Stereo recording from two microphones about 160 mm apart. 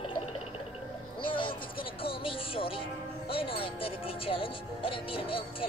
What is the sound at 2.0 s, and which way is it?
Music, 35° left (ahead or behind).